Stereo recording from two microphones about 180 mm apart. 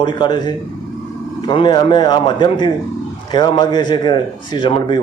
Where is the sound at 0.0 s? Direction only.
25° left (ahead or behind).